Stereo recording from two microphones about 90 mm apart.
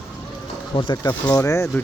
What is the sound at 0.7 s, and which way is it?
Speech, 60° left (ahead or behind).